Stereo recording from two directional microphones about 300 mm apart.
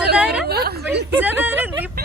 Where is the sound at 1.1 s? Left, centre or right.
Centre.